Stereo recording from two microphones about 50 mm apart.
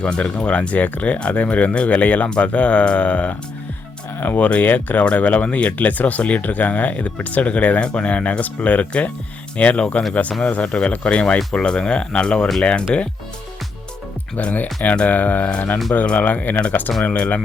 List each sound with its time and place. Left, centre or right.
0.0 s speech: left
14.9 s speech: left